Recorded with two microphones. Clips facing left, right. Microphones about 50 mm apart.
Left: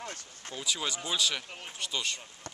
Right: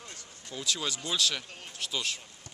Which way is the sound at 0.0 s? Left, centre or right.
Left.